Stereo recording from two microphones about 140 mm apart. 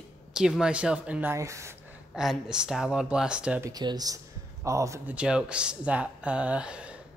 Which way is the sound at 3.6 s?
30° right (ahead or behind).